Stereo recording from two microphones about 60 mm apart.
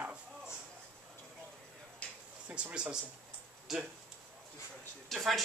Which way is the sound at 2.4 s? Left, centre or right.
Right.